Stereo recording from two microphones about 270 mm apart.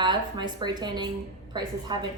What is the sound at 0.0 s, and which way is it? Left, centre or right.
A woman's voice, centre.